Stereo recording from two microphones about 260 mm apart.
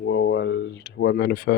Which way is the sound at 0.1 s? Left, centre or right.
Left.